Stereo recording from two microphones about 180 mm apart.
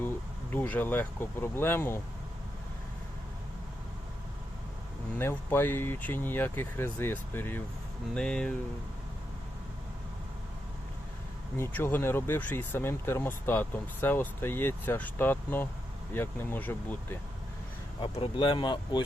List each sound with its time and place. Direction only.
0.5 s speech: 10° left (ahead or behind)
5.1 s speech: 10° left (ahead or behind)
11.5 s speech: 15° left (ahead or behind)
18.0 s speech: 30° left (ahead or behind)